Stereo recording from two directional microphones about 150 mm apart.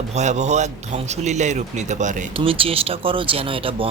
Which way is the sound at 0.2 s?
50° right (ahead or behind).